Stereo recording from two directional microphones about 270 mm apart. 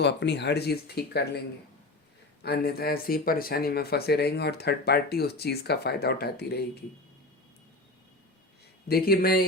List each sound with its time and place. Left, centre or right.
0.0 s speech: left
2.4 s speech: left
8.9 s speech: left